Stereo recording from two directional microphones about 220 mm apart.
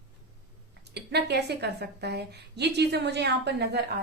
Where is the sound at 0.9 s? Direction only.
50° right (ahead or behind).